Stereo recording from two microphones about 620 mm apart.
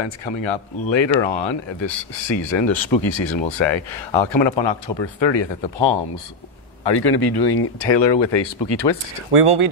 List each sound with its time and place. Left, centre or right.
0.0 s speech: left
9.3 s speech: right